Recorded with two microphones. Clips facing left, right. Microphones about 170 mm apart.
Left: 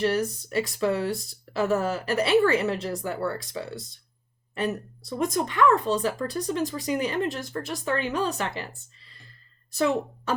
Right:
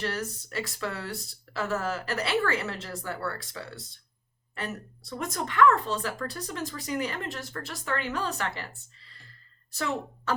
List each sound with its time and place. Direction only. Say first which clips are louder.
0.0 s speech: left 8 dB; 15° left (ahead or behind)
9.7 s speech: left 7 dB; 15° left (ahead or behind)